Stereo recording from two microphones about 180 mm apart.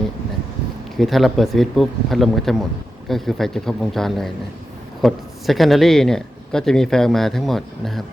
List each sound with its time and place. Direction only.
0.9 s speech: centre (ahead or behind)